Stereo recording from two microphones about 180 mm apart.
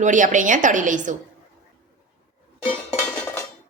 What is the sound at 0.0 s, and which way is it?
A woman's voice, 45° right (ahead or behind).